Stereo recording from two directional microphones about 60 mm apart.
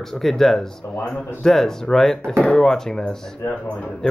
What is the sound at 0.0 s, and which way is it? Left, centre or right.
Speech, centre.